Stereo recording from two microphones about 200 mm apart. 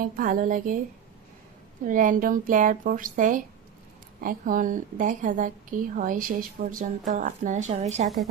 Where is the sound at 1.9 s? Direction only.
40° right (ahead or behind).